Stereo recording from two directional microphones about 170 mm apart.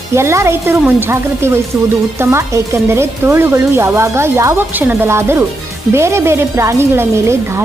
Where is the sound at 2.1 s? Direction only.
15° right (ahead or behind).